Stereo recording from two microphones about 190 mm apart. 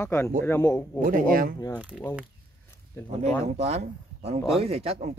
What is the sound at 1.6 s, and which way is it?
Speech, 10° left (ahead or behind).